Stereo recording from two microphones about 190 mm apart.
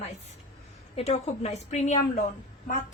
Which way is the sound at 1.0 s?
35° left (ahead or behind).